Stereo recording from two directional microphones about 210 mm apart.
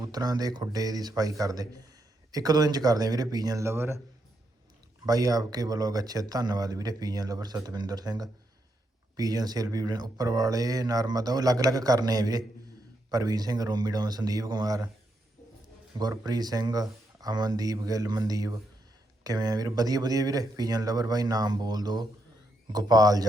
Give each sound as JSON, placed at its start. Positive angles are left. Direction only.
{"t": 0.0, "sound": "speech", "side_deg": -20}
{"t": 5.0, "sound": "speech", "side_deg": -15}
{"t": 16.0, "sound": "speech", "side_deg": -20}